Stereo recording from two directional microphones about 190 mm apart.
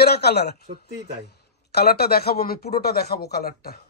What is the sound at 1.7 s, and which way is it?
Speech, 55° left (ahead or behind).